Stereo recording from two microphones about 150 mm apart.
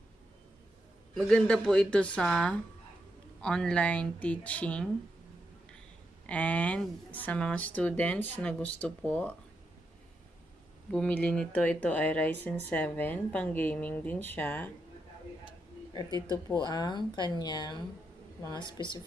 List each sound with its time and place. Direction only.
1.1 s speech: 5° left (ahead or behind)
6.2 s speech: 10° left (ahead or behind)
10.9 s speech: 5° left (ahead or behind)
15.9 s a woman's voice: 30° left (ahead or behind)